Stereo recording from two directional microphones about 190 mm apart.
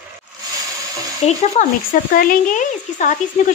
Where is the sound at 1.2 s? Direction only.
40° left (ahead or behind).